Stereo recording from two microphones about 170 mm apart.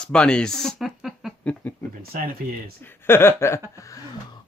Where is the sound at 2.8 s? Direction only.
15° left (ahead or behind).